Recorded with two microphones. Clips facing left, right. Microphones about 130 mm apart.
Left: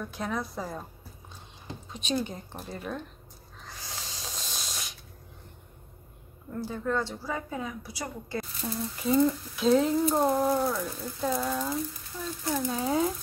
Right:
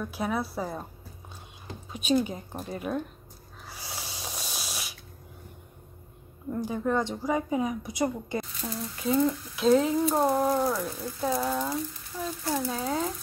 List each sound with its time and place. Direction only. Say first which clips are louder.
0.0 s a woman's voice: right 3 dB; 10° right (ahead or behind)
1.9 s a woman's voice: right 5 dB; 10° right (ahead or behind)
3.6 s snort: right 2 dB; 10° right (ahead or behind)
6.5 s a woman's voice: right 3 dB; 15° right (ahead or behind)
8.6 s speech: left 3 dB; centre (ahead or behind)